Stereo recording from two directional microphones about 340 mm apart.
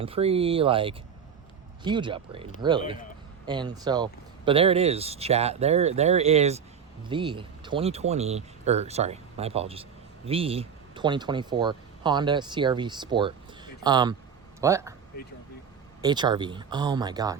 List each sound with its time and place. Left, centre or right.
0.0 s speech: centre
16.0 s speech: centre